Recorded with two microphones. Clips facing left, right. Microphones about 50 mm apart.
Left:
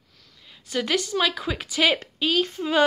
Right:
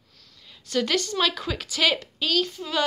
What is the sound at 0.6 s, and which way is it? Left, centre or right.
A woman's voice, centre.